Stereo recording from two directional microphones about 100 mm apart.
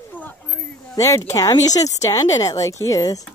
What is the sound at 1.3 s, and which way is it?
Speech, 35° left (ahead or behind).